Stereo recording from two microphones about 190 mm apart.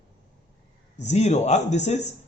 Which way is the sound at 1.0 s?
35° left (ahead or behind).